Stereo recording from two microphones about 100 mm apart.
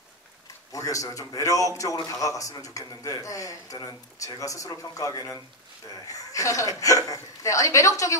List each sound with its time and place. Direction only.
0.7 s a man's voice: 35° left (ahead or behind)